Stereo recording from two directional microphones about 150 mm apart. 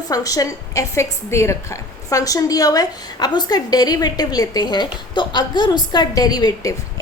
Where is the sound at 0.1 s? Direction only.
25° left (ahead or behind).